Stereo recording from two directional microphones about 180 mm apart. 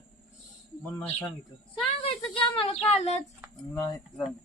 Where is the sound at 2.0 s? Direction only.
30° left (ahead or behind).